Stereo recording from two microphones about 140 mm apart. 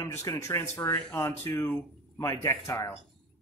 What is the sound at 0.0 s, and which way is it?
Speech, 20° left (ahead or behind).